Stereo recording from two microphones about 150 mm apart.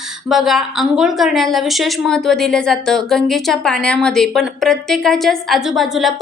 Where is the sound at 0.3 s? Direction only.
Centre (ahead or behind).